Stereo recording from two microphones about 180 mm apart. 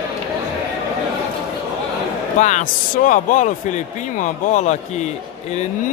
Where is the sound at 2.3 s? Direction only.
40° left (ahead or behind).